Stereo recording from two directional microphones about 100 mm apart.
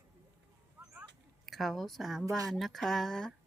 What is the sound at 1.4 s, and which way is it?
A woman's voice, centre (ahead or behind).